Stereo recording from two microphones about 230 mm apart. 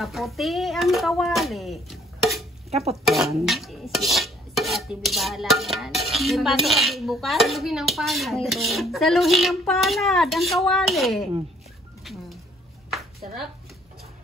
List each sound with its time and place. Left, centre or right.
0.0 s a child's voice: centre
2.7 s stir: right
3.4 s rub: centre
12.0 s a sound: centre